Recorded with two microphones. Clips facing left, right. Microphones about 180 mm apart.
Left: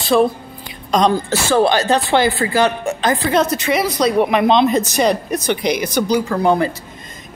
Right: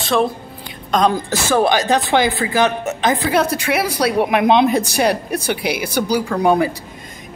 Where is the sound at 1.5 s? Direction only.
15° right (ahead or behind).